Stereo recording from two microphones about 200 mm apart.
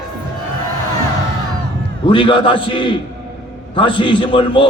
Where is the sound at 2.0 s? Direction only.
25° left (ahead or behind).